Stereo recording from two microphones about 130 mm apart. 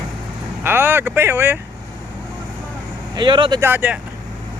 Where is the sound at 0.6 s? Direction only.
15° right (ahead or behind).